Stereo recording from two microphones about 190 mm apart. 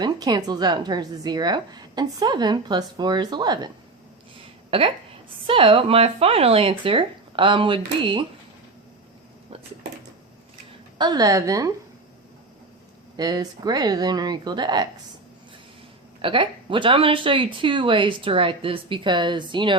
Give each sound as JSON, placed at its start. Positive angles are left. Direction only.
{"t": 0.0, "sound": "a woman's voice", "side_deg": -20}
{"t": 4.7, "sound": "a woman's voice", "side_deg": -30}
{"t": 10.9, "sound": "a woman's voice", "side_deg": -20}
{"t": 13.1, "sound": "a woman's voice", "side_deg": -20}
{"t": 16.2, "sound": "a woman's voice", "side_deg": -25}